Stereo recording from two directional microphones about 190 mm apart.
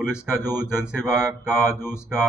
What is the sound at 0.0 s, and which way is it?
A man's voice, 5° right (ahead or behind).